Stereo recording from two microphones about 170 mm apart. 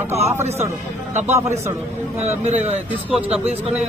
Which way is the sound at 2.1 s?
40° right (ahead or behind).